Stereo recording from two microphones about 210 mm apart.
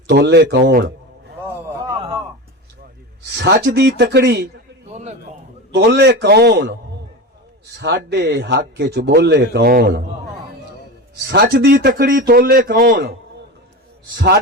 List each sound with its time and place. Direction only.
0.1 s speech: 50° right (ahead or behind)
1.9 s a sound: 25° right (ahead or behind)
3.3 s speech: 55° right (ahead or behind)
4.9 s a sound: 35° right (ahead or behind)
5.7 s speech: 50° right (ahead or behind)
7.8 s speech: 55° right (ahead or behind)
11.3 s speech: 50° right (ahead or behind)